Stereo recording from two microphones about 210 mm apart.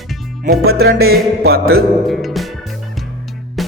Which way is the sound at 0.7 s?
50° right (ahead or behind).